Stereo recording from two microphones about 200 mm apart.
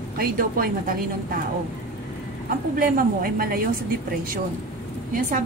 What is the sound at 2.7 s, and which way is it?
Speech, 45° right (ahead or behind).